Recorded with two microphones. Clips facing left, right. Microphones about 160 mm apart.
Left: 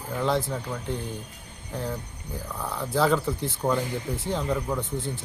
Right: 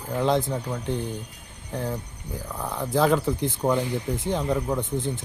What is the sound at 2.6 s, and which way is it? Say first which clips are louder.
Speech: right 2 dB; 15° right (ahead or behind).